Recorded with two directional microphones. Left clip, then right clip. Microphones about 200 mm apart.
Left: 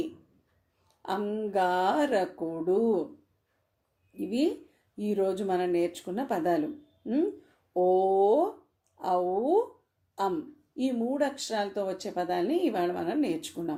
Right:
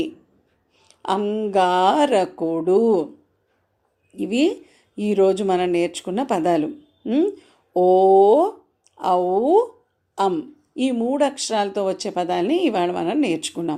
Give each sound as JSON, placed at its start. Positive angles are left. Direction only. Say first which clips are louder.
{"t": 0.9, "sound": "speech", "louder": "right 10 dB", "side_deg": -25}
{"t": 4.2, "sound": "speech", "louder": "right 9 dB", "side_deg": -25}